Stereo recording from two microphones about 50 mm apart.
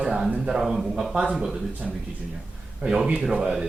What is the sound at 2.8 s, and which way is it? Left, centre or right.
Speech, right.